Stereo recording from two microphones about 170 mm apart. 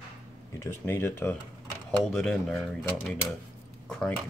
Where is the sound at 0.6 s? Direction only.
15° left (ahead or behind).